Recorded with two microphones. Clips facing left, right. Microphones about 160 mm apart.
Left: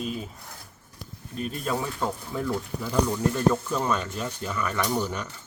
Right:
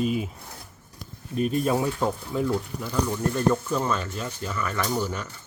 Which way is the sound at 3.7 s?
15° left (ahead or behind).